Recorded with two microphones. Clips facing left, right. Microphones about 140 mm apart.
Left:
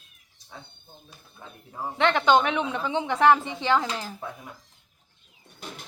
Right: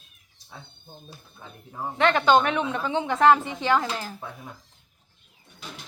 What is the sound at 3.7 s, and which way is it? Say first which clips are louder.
Speech: right 1 dB; 10° right (ahead or behind).